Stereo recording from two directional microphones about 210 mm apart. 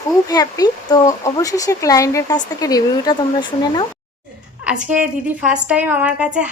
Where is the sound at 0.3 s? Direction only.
20° left (ahead or behind).